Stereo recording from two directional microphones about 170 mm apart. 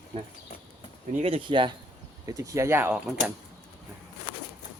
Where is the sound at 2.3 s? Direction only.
20° right (ahead or behind).